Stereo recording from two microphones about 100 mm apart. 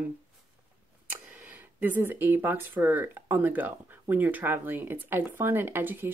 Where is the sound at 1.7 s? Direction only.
20° right (ahead or behind).